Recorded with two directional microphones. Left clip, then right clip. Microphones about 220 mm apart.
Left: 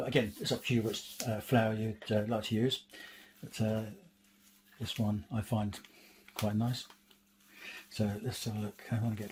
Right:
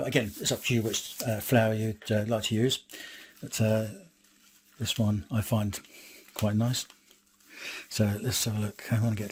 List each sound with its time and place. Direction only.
0.0 s speech: 50° right (ahead or behind)